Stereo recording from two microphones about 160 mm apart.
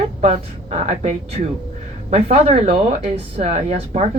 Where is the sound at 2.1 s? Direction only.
40° right (ahead or behind).